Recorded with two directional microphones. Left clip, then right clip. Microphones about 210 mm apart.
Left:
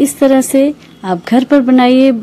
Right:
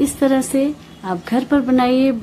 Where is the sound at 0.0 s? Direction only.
30° left (ahead or behind).